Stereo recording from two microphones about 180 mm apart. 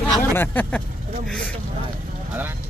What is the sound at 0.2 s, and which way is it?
Speech, 10° left (ahead or behind).